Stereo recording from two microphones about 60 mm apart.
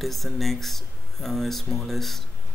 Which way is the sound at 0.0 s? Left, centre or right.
Centre.